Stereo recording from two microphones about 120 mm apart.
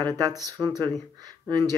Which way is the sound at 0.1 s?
30° right (ahead or behind).